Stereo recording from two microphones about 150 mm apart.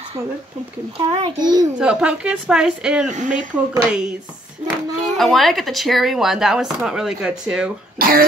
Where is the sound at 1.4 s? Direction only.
25° right (ahead or behind).